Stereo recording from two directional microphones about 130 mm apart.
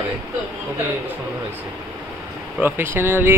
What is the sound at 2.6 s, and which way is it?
Speech, 15° right (ahead or behind).